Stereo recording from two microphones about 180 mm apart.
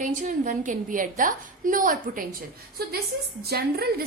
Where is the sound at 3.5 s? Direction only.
60° right (ahead or behind).